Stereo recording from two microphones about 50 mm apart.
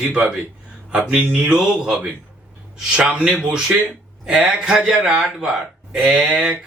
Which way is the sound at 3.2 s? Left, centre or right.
Centre.